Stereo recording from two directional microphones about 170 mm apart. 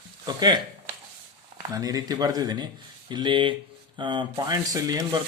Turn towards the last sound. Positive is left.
turn(degrees=-20)  # may be behind; listen again after turning